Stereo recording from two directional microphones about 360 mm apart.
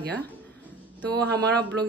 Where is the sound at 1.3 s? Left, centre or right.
Right.